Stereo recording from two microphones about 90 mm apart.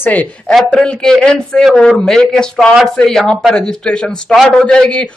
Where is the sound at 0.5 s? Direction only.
5° left (ahead or behind).